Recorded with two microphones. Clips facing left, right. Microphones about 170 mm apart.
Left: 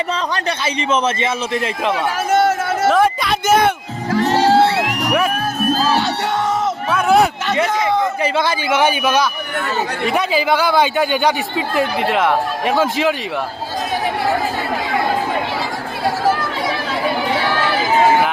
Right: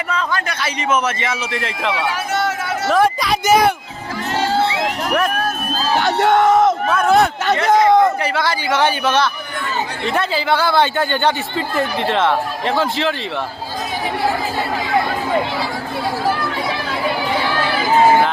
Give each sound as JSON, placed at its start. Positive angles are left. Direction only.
{"t": 0.1, "sound": "speech", "side_deg": 35}
{"t": 1.9, "sound": "a sound", "side_deg": 50}
{"t": 2.9, "sound": "speech", "side_deg": 0}
{"t": 4.4, "sound": "crowd", "side_deg": 70}
{"t": 6.0, "sound": "speech", "side_deg": -55}
{"t": 6.9, "sound": "a man's voice", "side_deg": 10}
{"t": 7.4, "sound": "speech", "side_deg": -45}
{"t": 8.2, "sound": "a man's voice", "side_deg": 20}